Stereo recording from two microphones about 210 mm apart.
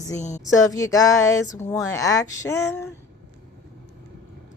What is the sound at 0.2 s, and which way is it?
Speech, 35° left (ahead or behind).